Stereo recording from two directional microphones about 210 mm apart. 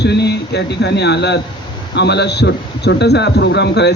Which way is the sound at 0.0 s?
55° left (ahead or behind).